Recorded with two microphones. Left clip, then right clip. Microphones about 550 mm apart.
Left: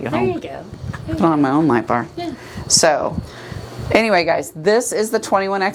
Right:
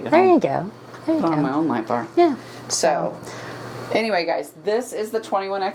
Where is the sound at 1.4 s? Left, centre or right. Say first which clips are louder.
Left 6 dB; left.